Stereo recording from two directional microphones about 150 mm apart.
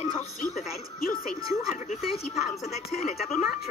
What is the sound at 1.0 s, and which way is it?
Speech, 75° left (ahead or behind).